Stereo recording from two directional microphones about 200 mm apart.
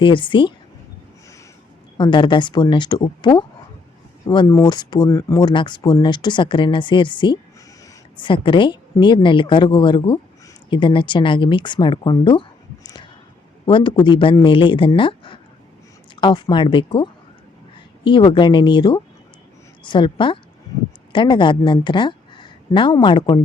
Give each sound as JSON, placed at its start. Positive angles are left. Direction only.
{"t": 0.0, "sound": "speech", "side_deg": 25}
{"t": 2.0, "sound": "a woman's voice", "side_deg": 25}